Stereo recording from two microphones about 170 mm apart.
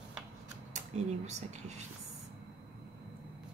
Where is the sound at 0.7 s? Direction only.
40° right (ahead or behind).